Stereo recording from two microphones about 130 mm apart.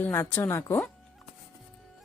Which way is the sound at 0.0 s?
15° left (ahead or behind).